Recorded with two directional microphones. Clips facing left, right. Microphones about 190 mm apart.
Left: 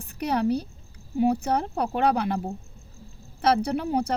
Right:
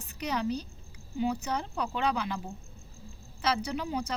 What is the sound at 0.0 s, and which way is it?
A woman's voice, 60° left (ahead or behind).